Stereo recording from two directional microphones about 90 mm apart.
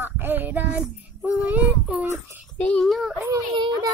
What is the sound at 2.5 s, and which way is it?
Speech, 15° left (ahead or behind).